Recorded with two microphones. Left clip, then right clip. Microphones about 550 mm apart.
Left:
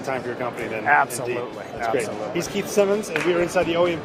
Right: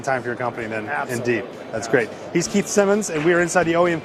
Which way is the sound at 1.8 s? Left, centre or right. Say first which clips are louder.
Right 3 dB; right.